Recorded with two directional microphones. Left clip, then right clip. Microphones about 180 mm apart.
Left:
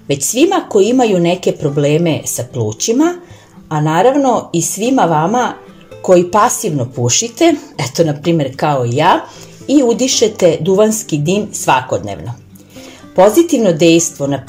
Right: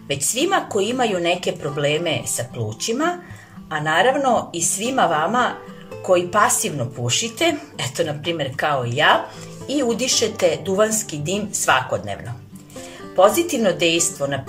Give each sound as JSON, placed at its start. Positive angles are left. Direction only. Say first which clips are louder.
{"t": 0.1, "sound": "speech", "louder": "left 7 dB", "side_deg": 20}